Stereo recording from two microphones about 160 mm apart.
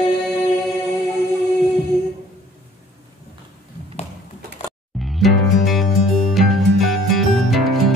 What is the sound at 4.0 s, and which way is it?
Typing, 40° left (ahead or behind).